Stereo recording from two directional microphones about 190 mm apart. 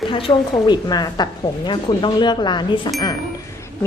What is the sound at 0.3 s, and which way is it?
Speech, 20° left (ahead or behind).